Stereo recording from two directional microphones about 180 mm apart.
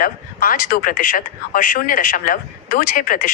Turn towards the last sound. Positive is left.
turn(degrees=50)  # may be behind; listen again after turning